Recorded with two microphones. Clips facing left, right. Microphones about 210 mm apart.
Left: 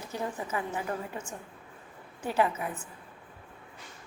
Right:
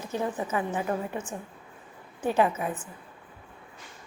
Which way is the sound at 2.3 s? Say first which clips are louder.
Right 4 dB; 25° right (ahead or behind).